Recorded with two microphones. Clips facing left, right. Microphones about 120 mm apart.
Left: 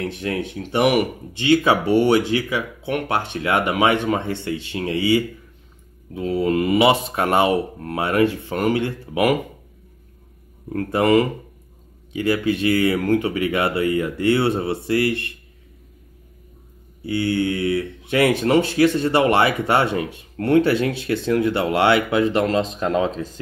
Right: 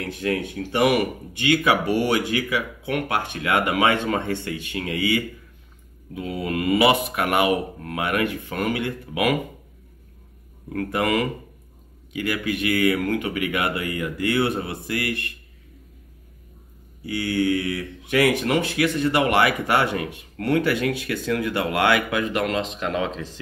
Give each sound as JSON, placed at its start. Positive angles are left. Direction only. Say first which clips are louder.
{"t": 0.0, "sound": "speech", "louder": "left 1 dB", "side_deg": 25}
{"t": 10.7, "sound": "speech", "louder": "left 6 dB", "side_deg": 25}
{"t": 17.0, "sound": "speech", "louder": "left 2 dB", "side_deg": 25}